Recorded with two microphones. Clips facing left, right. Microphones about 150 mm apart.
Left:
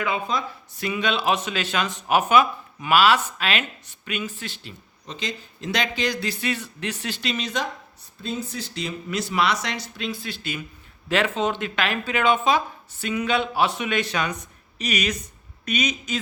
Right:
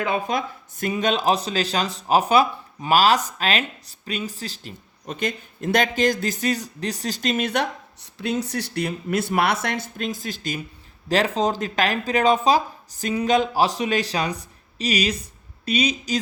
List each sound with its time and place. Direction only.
0.3 s speech: 50° right (ahead or behind)
5.0 s speech: 55° right (ahead or behind); by 16.2 s 35° right (ahead or behind)